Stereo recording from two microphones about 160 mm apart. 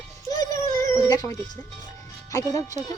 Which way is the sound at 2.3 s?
20° left (ahead or behind).